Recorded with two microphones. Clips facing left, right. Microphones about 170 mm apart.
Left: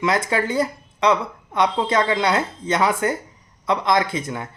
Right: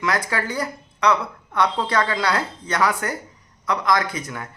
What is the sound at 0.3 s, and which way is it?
Speech, 25° left (ahead or behind).